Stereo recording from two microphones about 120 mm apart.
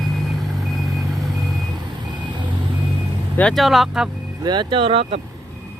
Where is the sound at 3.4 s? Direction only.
5° left (ahead or behind).